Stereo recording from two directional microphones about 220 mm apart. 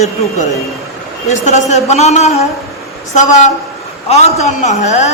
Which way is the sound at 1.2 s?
30° left (ahead or behind).